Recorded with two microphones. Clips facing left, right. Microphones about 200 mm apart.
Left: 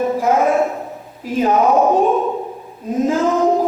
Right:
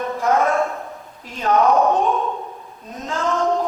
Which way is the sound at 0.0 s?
5° left (ahead or behind).